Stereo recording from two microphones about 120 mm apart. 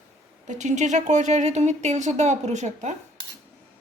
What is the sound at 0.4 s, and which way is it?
Speech, 90° right.